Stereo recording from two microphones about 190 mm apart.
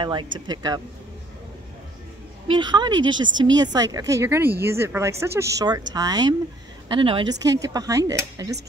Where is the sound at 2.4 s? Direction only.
25° right (ahead or behind).